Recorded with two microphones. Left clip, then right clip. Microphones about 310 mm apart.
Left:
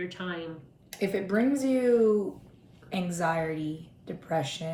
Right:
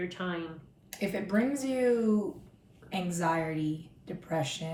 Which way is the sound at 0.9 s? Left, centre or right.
Centre.